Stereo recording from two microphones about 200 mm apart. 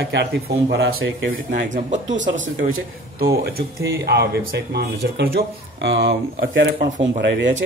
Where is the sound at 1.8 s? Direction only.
40° right (ahead or behind).